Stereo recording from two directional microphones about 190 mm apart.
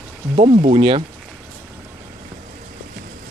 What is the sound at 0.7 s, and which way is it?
Speech, 30° right (ahead or behind).